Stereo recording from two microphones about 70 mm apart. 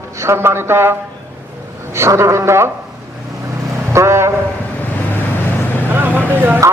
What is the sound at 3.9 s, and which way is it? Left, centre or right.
Speech, right.